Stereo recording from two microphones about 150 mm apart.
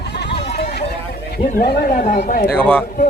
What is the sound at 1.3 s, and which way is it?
Speech, 75° left (ahead or behind).